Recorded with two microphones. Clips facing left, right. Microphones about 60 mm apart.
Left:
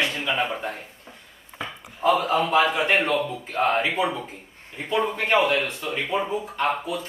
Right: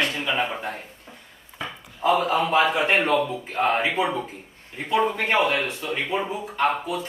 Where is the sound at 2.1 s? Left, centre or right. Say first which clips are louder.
Right 2 dB; centre.